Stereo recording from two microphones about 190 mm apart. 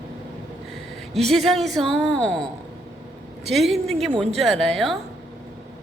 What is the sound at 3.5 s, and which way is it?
A woman's voice, centre (ahead or behind).